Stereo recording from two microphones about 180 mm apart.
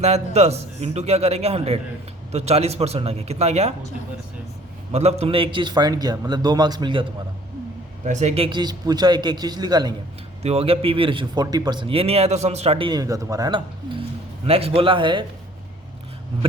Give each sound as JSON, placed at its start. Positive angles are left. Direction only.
{"t": 0.0, "sound": "a man's voice", "side_deg": -35}
{"t": 4.9, "sound": "speech", "side_deg": -35}
{"t": 8.0, "sound": "a man's voice", "side_deg": -40}
{"t": 8.4, "sound": "speech", "side_deg": -25}
{"t": 10.4, "sound": "speech", "side_deg": -35}
{"t": 14.4, "sound": "a man's voice", "side_deg": -35}